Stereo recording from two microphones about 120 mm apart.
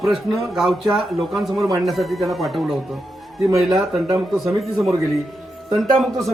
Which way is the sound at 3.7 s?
30° right (ahead or behind).